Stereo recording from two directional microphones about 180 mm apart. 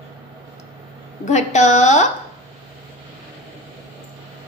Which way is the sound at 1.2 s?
40° left (ahead or behind).